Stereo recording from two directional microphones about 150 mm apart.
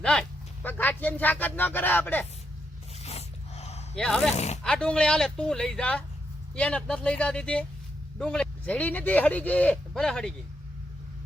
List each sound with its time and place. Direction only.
0.0 s speech: 5° left (ahead or behind)
3.0 s dog: 45° left (ahead or behind)
3.9 s speech: 5° left (ahead or behind)
4.4 s speech: 45° left (ahead or behind)
4.6 s speech: 5° left (ahead or behind)